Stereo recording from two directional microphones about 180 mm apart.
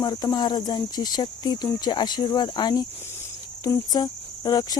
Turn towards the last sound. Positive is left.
turn(degrees=20)  # may be behind; listen again after turning